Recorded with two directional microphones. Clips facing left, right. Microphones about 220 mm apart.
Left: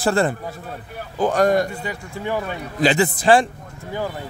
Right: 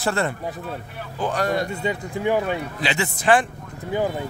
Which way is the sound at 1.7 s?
25° right (ahead or behind).